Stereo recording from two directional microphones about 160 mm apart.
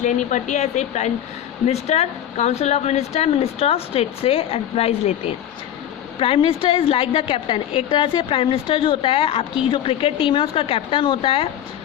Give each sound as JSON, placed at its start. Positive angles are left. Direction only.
{"t": 0.0, "sound": "speech", "side_deg": 50}
{"t": 6.1, "sound": "speech", "side_deg": 35}